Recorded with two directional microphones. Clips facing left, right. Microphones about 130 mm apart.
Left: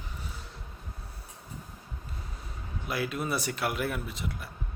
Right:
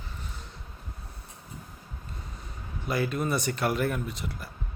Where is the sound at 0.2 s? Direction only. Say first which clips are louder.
Even; 5° left (ahead or behind).